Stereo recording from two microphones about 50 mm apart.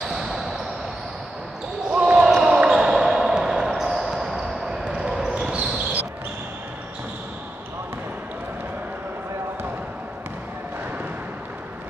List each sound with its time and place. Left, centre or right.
0.1 s basketball bounce: centre
1.9 s basketball bounce: right